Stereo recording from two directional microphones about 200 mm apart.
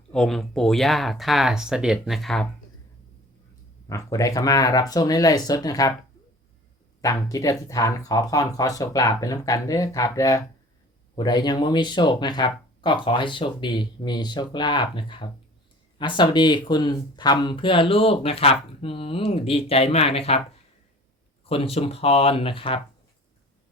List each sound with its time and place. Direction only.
0.1 s speech: 5° left (ahead or behind)
3.8 s speech: 15° left (ahead or behind)
7.0 s speech: 15° left (ahead or behind)
21.4 s speech: 30° left (ahead or behind)